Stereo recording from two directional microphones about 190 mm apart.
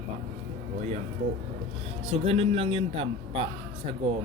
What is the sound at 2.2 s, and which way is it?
A man's voice, 30° right (ahead or behind).